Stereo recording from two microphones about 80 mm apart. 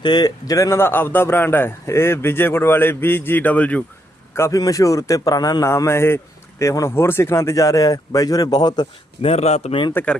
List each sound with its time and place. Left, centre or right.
0.0 s speech: left
0.8 s a man's voice: left
4.4 s a man's voice: left
5.6 s a man's voice: left
10.0 s a man's voice: left